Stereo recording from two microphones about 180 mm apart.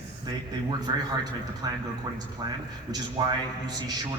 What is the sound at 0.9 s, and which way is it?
A man's voice, 25° right (ahead or behind).